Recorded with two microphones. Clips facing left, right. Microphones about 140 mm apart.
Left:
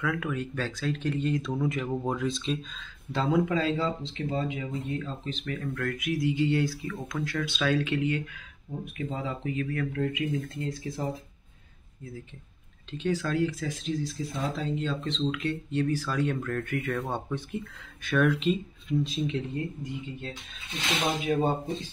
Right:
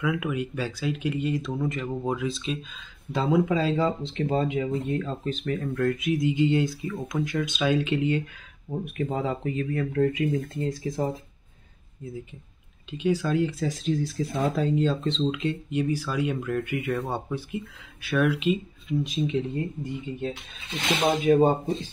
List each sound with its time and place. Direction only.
0.0 s speech: 10° right (ahead or behind)
3.1 s speech: 20° right (ahead or behind)
3.7 s speech: 45° right (ahead or behind)
4.3 s speech: 65° right (ahead or behind); by 5.5 s 45° right (ahead or behind)
5.5 s speech: 25° right (ahead or behind)
8.9 s speech: 45° right (ahead or behind)
9.6 s speech: 30° right (ahead or behind)
12.9 s speech: 10° right (ahead or behind)
13.7 s speech: 45° right (ahead or behind)
14.0 s speech: 60° right (ahead or behind)
14.8 s speech: 35° right (ahead or behind); by 18.9 s 5° right (ahead or behind)
19.0 s speech: 15° right (ahead or behind)
21.1 s speech: 50° right (ahead or behind)